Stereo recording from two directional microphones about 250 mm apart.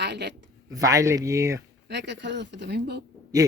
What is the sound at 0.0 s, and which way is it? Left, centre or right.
Speech, right.